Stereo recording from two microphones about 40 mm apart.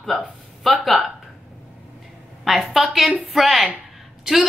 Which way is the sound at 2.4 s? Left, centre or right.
Centre.